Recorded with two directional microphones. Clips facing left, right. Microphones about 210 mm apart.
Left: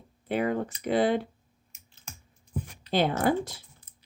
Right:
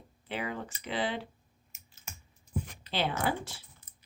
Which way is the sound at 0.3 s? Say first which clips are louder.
Left 9 dB; 50° left (ahead or behind).